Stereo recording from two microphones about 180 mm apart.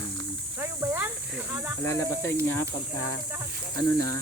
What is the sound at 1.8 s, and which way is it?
Speech, 15° left (ahead or behind).